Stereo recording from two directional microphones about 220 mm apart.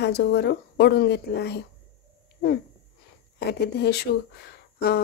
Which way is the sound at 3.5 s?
45° left (ahead or behind).